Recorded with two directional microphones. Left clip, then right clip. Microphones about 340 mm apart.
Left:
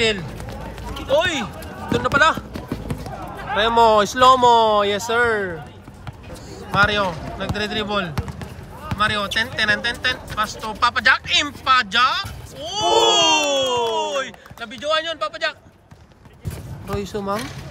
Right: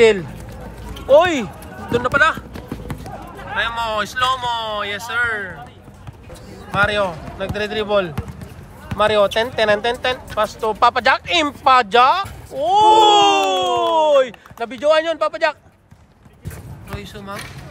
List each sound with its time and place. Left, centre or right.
1.0 s speech: centre
1.9 s clip-clop: centre
3.3 s speech: centre
6.7 s speech: centre
16.9 s speech: centre